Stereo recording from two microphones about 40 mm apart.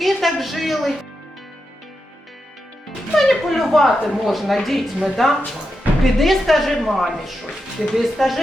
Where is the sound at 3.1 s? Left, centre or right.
Centre.